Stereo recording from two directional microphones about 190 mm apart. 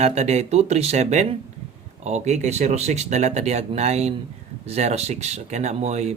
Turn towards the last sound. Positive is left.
turn(degrees=-35)  # may be behind; listen again after turning